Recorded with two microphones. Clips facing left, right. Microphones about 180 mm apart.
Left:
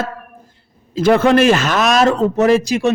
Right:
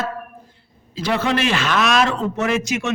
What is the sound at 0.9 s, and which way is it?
A man's voice, 50° left (ahead or behind).